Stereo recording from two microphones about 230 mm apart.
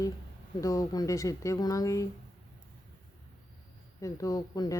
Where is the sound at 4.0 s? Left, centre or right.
Centre.